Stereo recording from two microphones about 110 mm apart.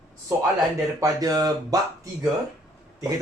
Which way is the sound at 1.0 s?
35° right (ahead or behind).